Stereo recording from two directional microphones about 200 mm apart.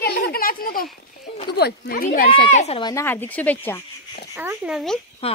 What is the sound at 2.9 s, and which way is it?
Speech, 10° left (ahead or behind).